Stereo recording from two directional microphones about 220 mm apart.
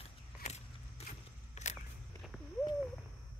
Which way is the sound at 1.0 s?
30° left (ahead or behind).